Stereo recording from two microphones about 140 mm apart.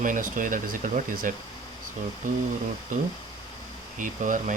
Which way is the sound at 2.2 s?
65° right (ahead or behind).